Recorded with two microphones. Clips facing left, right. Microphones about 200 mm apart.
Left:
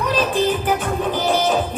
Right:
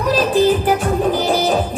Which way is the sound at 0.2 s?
35° right (ahead or behind).